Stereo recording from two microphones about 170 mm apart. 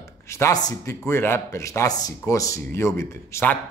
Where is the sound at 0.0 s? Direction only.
15° left (ahead or behind).